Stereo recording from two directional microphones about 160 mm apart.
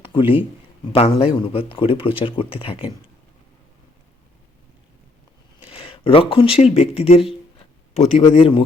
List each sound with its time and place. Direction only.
0.0 s a sound: 30° left (ahead or behind)
0.9 s speech: 35° left (ahead or behind)
5.7 s speech: 35° left (ahead or behind)